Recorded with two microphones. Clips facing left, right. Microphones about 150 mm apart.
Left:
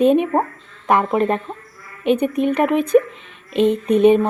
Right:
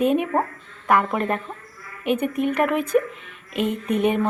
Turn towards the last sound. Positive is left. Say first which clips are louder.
# left 8 dB
turn(degrees=20)  # may be behind; listen again after turning